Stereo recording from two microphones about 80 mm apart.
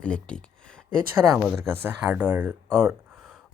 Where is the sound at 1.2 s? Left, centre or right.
Centre.